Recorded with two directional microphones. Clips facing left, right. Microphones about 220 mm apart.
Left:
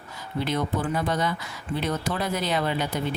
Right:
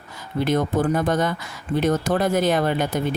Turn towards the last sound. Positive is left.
turn(degrees=-50)  # may be behind; listen again after turning